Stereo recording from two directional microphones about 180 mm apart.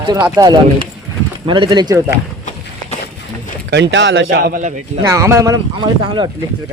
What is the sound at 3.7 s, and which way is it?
Speech, 85° right.